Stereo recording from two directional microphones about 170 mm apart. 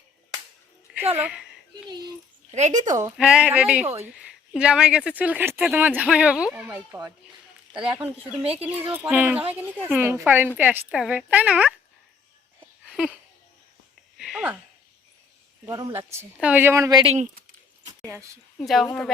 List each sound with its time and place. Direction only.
1.1 s speech: 5° right (ahead or behind)
2.5 s speech: 45° right (ahead or behind)
3.2 s speech: 5° right (ahead or behind)
8.3 s speech: 35° right (ahead or behind)
8.6 s speech: 10° right (ahead or behind)
12.9 s a sound: 5° right (ahead or behind)
14.2 s a sound: centre (ahead or behind)
15.7 s speech: 15° right (ahead or behind)
17.1 s speech: 45° right (ahead or behind)
18.6 s a woman's voice: centre (ahead or behind)